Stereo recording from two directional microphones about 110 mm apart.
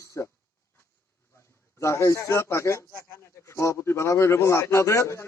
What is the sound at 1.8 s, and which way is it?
A man's voice, 25° left (ahead or behind).